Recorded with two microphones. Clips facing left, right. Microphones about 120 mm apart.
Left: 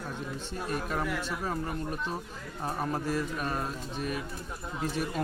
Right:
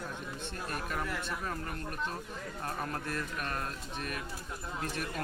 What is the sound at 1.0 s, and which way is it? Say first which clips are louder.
Speech: left 4 dB; 10° left (ahead or behind).